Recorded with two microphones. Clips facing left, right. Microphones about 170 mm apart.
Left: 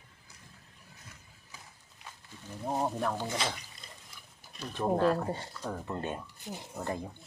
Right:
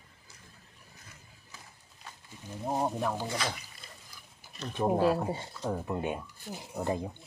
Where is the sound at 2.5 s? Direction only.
10° right (ahead or behind).